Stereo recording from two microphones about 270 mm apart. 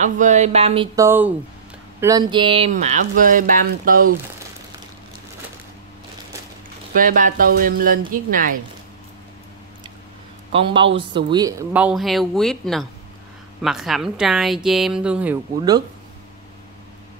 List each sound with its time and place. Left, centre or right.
0.0 s speech: right
0.9 s speech: centre; by 4.1 s right
7.0 s speech: right
10.5 s speech: centre